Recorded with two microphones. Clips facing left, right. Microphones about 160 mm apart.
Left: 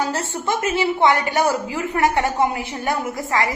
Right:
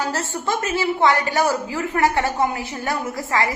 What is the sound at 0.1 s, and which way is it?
A woman's voice, 20° left (ahead or behind).